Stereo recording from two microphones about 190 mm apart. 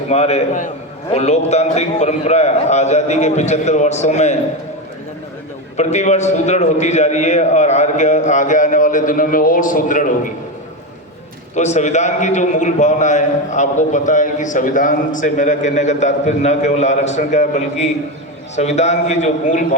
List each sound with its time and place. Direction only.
0.1 s a man's voice: 35° left (ahead or behind)
5.7 s a man's voice: 35° left (ahead or behind)
11.5 s a man's voice: 40° left (ahead or behind)